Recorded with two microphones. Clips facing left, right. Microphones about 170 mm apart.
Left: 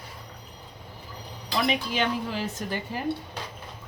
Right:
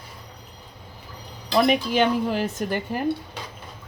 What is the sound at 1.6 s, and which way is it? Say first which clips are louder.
Speech: right 7 dB; 50° right (ahead or behind).